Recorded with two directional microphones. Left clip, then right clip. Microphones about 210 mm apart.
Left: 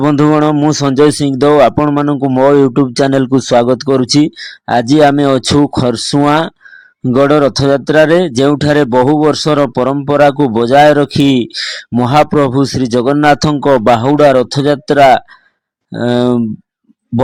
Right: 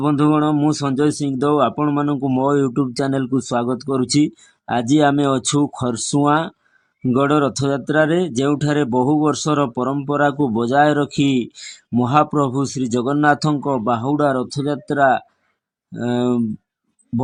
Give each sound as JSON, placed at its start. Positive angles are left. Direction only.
{"t": 0.0, "sound": "speech", "side_deg": 25}